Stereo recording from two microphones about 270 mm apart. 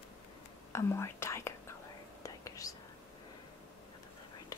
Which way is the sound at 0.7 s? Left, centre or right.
Centre.